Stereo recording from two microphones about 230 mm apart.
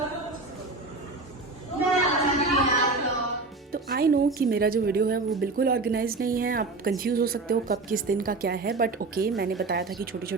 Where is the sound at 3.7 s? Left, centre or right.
Right.